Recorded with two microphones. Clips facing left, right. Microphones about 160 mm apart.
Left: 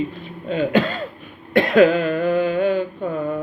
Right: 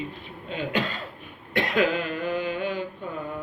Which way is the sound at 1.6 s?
50° left (ahead or behind).